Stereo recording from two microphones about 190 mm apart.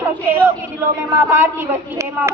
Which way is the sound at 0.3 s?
10° right (ahead or behind).